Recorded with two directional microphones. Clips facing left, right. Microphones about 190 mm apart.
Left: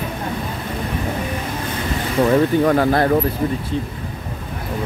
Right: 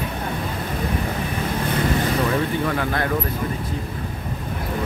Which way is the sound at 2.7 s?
40° left (ahead or behind).